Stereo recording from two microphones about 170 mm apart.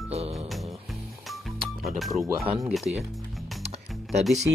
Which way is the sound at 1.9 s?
Centre (ahead or behind).